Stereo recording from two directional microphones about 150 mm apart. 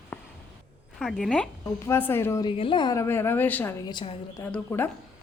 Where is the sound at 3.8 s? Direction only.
30° left (ahead or behind).